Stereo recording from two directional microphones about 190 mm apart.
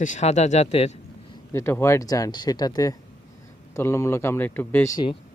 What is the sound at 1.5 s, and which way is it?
A man's voice, 15° left (ahead or behind).